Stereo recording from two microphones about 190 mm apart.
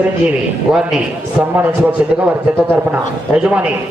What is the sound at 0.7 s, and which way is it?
A man's voice, 5° right (ahead or behind).